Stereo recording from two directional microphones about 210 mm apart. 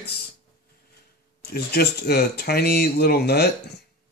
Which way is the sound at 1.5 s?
50° left (ahead or behind).